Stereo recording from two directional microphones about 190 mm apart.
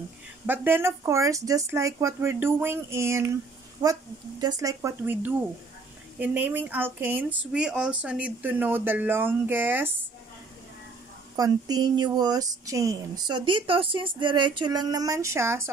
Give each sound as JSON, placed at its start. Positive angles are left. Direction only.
{"t": 0.5, "sound": "speech", "side_deg": -10}
{"t": 11.3, "sound": "speech", "side_deg": -20}